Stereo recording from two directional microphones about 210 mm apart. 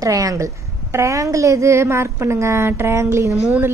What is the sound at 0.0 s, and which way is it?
A woman's voice, 15° right (ahead or behind).